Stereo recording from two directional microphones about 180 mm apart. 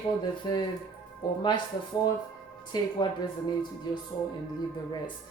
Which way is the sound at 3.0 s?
25° left (ahead or behind).